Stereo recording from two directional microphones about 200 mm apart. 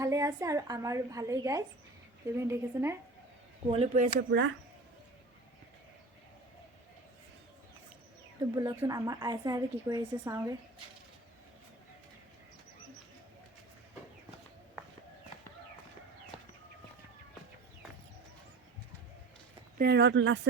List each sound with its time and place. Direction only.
0.0 s a woman's voice: 15° right (ahead or behind)
3.7 s speech: 35° right (ahead or behind)
4.3 s speech: 70° right (ahead or behind)
8.5 s a woman's voice: 15° right (ahead or behind)
19.8 s speech: 55° right (ahead or behind)